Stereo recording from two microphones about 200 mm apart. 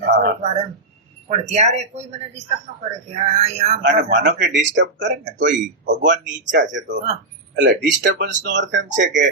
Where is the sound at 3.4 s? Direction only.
30° right (ahead or behind).